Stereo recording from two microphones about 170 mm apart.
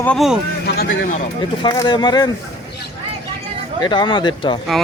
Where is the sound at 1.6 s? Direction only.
25° left (ahead or behind).